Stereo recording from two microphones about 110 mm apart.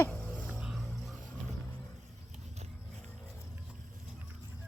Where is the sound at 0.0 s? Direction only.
15° left (ahead or behind).